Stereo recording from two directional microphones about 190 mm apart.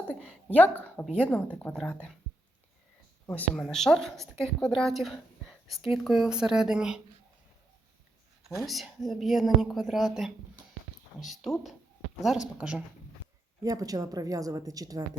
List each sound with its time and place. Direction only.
0.0 s a woman's voice: 5° left (ahead or behind)
3.2 s a woman's voice: 10° left (ahead or behind)
8.4 s a woman's voice: centre (ahead or behind)
13.6 s a woman's voice: 20° right (ahead or behind)